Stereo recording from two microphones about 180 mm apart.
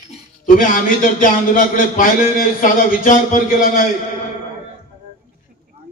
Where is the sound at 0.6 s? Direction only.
50° left (ahead or behind).